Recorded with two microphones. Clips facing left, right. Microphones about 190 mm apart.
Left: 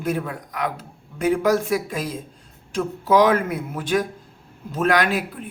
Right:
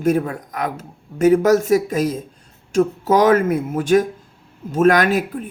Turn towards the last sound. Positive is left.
turn(degrees=-45)  # may be behind; listen again after turning